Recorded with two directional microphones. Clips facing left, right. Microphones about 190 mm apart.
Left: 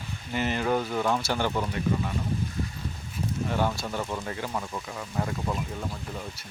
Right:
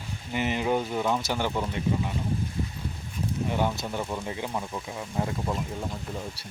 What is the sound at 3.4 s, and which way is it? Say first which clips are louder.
Speech: even; 15° right (ahead or behind).